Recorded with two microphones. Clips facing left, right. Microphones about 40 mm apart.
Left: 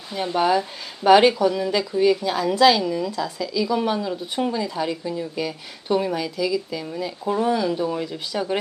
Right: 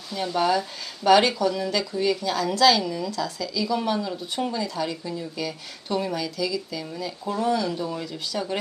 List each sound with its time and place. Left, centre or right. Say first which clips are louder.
0.1 s speech: left 3 dB; centre